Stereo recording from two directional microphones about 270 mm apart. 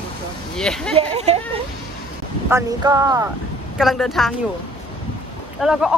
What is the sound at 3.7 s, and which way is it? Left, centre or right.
Speech, centre.